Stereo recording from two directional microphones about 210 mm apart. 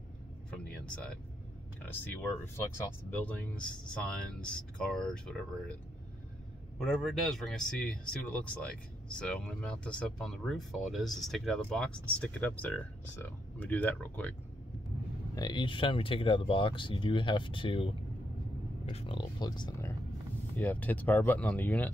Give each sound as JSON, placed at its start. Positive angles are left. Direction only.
{"t": 0.5, "sound": "a sound", "side_deg": 5}
{"t": 2.4, "sound": "speech", "side_deg": 10}
{"t": 6.8, "sound": "speech", "side_deg": 0}
{"t": 15.3, "sound": "speech", "side_deg": 20}
{"t": 20.5, "sound": "speech", "side_deg": 10}